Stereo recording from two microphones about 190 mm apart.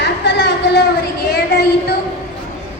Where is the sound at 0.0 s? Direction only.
65° left (ahead or behind).